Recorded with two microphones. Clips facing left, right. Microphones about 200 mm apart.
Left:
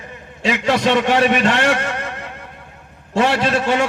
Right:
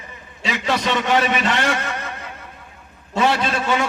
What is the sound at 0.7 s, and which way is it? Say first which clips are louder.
A man's voice: left 4 dB; 60° left (ahead or behind).